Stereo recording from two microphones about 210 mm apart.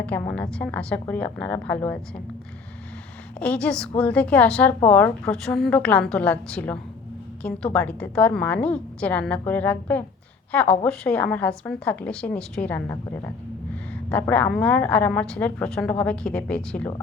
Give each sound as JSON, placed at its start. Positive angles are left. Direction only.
{"t": 0.0, "sound": "a woman's voice", "side_deg": 5}
{"t": 3.4, "sound": "a woman's voice", "side_deg": 5}